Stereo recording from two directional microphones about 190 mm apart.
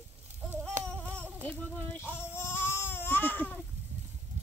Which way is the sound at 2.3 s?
10° left (ahead or behind).